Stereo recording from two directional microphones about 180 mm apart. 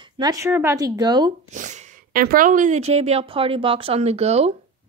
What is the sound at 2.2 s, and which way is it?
Speech, 50° right (ahead or behind).